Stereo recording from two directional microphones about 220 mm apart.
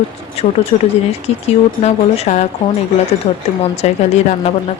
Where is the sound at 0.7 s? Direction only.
30° left (ahead or behind).